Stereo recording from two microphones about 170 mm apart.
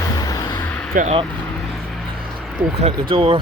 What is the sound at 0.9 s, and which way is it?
Speech, 40° right (ahead or behind).